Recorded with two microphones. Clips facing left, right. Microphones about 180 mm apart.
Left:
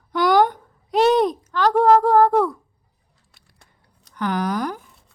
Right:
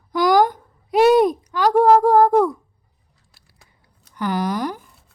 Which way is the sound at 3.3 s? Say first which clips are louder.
Even; 5° right (ahead or behind).